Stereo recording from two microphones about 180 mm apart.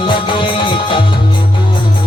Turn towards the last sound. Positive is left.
turn(degrees=25)  # may be behind; listen again after turning